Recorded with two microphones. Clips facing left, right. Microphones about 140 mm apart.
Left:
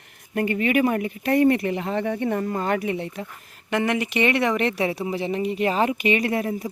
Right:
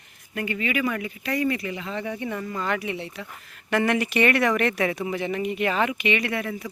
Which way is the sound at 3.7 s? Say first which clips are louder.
Even; 20° left (ahead or behind).